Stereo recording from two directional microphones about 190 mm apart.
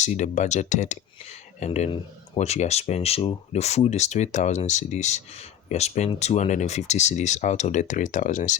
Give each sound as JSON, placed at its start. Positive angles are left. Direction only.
{"t": 0.0, "sound": "speech", "side_deg": 40}